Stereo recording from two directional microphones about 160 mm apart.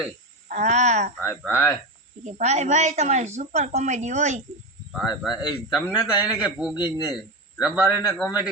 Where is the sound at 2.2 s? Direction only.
45° right (ahead or behind).